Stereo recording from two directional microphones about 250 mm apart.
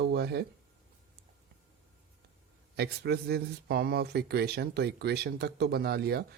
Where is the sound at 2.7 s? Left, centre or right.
Right.